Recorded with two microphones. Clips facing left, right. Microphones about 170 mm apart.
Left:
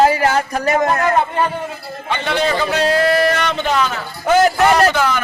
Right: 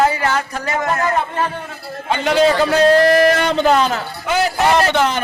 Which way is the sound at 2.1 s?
40° right (ahead or behind).